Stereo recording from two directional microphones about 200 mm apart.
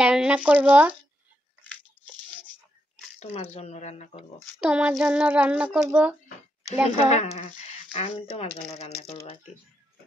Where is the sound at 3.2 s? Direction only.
35° left (ahead or behind).